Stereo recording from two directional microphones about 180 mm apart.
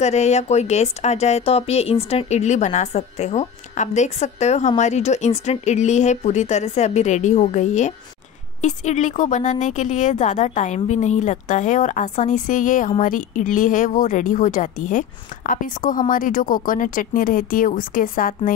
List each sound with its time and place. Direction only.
0.0 s a woman's voice: 40° left (ahead or behind)